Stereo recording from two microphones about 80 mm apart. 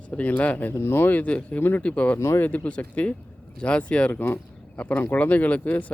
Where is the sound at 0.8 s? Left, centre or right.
Left.